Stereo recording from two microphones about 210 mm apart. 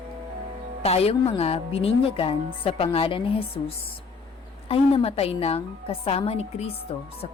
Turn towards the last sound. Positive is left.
turn(degrees=30)  # may be behind; listen again after turning